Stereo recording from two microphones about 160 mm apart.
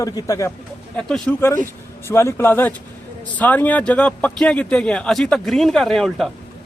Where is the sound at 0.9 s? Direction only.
5° left (ahead or behind).